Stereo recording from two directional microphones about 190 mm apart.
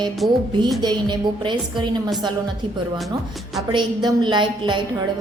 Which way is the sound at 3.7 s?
25° right (ahead or behind).